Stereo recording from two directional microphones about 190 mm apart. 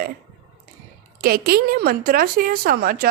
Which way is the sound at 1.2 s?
55° right (ahead or behind).